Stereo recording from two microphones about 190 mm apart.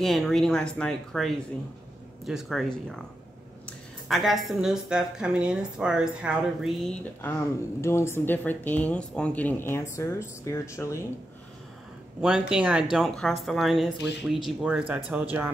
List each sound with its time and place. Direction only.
0.0 s a woman's voice: centre (ahead or behind)
4.1 s a woman's voice: centre (ahead or behind)
7.2 s speech: 10° left (ahead or behind)
12.2 s a woman's voice: 5° right (ahead or behind)